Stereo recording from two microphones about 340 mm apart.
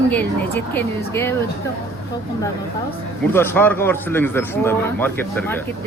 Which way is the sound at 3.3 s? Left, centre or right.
Centre.